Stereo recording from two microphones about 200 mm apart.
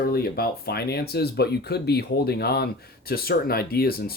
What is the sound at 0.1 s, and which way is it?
Speech, 50° left (ahead or behind).